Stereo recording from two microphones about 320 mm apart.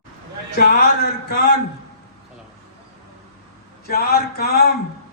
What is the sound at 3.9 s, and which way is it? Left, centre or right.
Speech, left.